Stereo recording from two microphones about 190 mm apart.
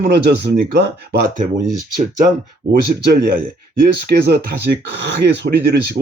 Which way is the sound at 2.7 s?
50° right (ahead or behind).